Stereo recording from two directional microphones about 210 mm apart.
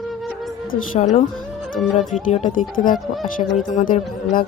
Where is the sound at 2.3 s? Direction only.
35° left (ahead or behind).